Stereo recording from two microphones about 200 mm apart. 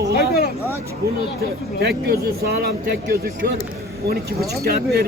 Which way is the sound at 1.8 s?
50° right (ahead or behind).